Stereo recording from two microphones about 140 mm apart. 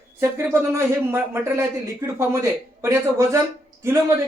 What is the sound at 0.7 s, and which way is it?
Speech, 20° right (ahead or behind).